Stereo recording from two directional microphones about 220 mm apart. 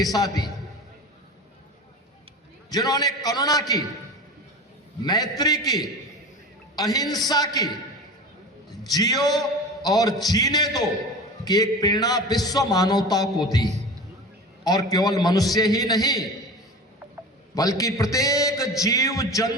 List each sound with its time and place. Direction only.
0.0 s a man's voice: 15° left (ahead or behind)
2.6 s a man's voice: 15° left (ahead or behind)
5.0 s a man's voice: 20° left (ahead or behind)
8.9 s a man's voice: 15° left (ahead or behind)
17.5 s a man's voice: 15° left (ahead or behind)